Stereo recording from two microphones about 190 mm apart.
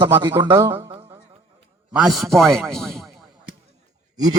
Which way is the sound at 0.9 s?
30° right (ahead or behind).